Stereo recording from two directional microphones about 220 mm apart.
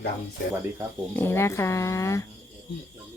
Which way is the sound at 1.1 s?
10° left (ahead or behind).